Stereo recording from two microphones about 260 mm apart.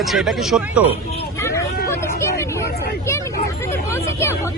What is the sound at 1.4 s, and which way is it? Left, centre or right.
Vehicle, centre.